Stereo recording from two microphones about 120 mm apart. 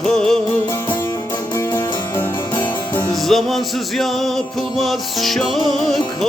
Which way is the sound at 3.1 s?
Centre (ahead or behind).